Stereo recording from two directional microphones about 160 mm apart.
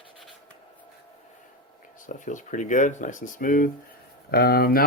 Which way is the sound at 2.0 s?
50° left (ahead or behind).